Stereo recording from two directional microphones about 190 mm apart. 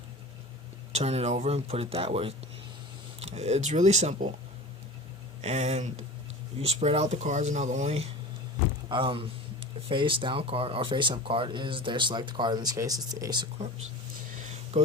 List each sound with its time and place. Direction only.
0.9 s speech: 35° right (ahead or behind)
5.4 s speech: 35° right (ahead or behind)